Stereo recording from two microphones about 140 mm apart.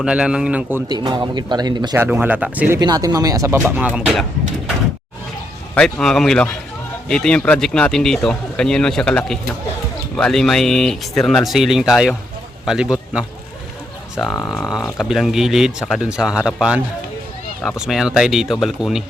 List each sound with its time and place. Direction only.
0.0 s speech: 5° right (ahead or behind)
0.9 s speech: 30° right (ahead or behind)
2.0 s speech: 15° right (ahead or behind)
2.8 s speech: 30° right (ahead or behind); by 4.7 s centre (ahead or behind)
5.7 s speech: 5° left (ahead or behind)
14.3 s speech: 10° left (ahead or behind)
14.9 s speech: centre (ahead or behind)